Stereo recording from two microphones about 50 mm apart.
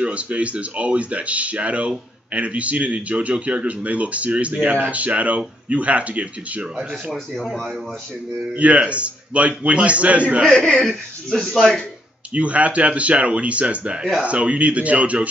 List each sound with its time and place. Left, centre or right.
0.0 s speech: right
8.4 s speech: right
10.5 s speech: centre
12.4 s speech: right